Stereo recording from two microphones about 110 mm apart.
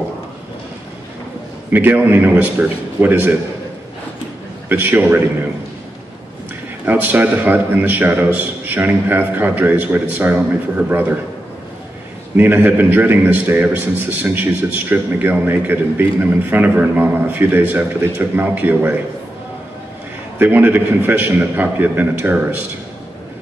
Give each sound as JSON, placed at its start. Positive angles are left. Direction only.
{"t": 1.7, "sound": "a man's voice", "side_deg": -15}
{"t": 4.6, "sound": "a man's voice", "side_deg": -15}
{"t": 6.9, "sound": "a man's voice", "side_deg": -15}
{"t": 12.4, "sound": "a man's voice", "side_deg": -15}
{"t": 20.3, "sound": "a man's voice", "side_deg": -15}